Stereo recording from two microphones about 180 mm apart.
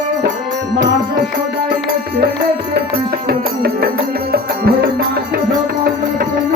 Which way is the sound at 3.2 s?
60° right (ahead or behind).